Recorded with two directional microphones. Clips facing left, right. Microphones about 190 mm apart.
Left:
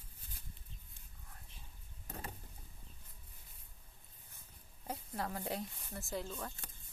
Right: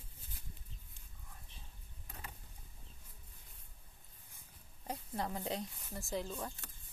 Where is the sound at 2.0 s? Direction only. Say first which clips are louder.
Left 6 dB; 40° left (ahead or behind).